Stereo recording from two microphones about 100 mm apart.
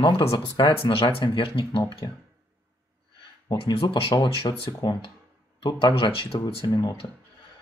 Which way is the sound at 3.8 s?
50° left (ahead or behind).